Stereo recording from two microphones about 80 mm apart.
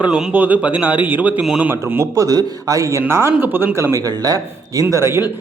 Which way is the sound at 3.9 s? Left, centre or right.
Right.